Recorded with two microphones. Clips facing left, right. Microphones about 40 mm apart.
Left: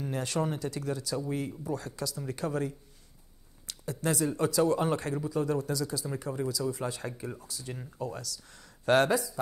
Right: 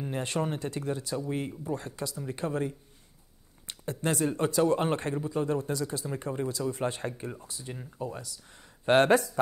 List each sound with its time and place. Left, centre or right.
0.0 s speech: right
9.1 s speech: right